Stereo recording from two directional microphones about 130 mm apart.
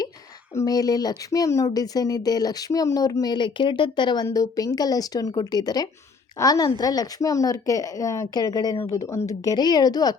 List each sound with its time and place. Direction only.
0.5 s speech: 25° left (ahead or behind)